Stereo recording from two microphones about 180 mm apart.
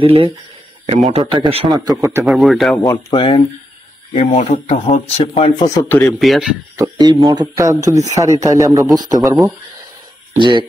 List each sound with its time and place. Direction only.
0.0 s speech: 35° right (ahead or behind)
1.9 s speech: 15° right (ahead or behind)
2.2 s speech: centre (ahead or behind)
2.8 s speech: 25° left (ahead or behind)
4.1 s speech: 40° left (ahead or behind)
5.9 s speech: 10° left (ahead or behind)
6.8 s speech: 20° right (ahead or behind)